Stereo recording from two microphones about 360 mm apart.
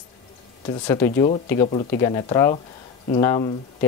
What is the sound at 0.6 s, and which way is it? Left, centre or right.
Speech, centre.